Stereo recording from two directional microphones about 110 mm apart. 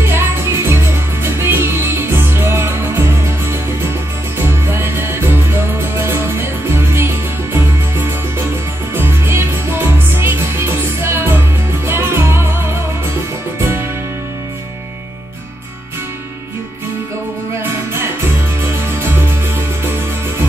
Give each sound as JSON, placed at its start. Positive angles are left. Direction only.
{"t": 0.0, "sound": "music", "side_deg": -20}
{"t": 18.9, "sound": "music", "side_deg": -20}